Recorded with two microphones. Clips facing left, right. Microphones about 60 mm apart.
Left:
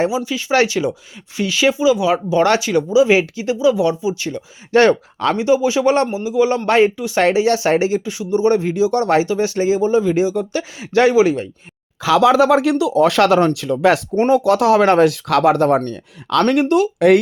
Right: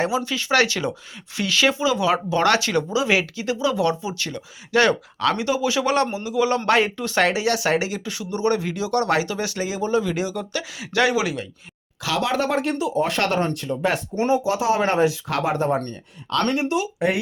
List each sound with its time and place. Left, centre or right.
0.3 s speech: left
4.7 s speech: left
5.4 s speech: left
6.1 s speech: centre
6.9 s speech: centre
7.2 s speech: left
12.5 s speech: left
14.3 s speech: left
16.4 s speech: left